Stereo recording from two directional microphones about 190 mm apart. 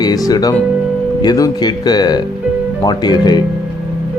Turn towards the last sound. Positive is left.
turn(degrees=20)  # may be behind; listen again after turning